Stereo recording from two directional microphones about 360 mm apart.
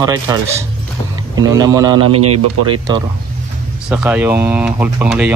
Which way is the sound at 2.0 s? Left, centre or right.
Right.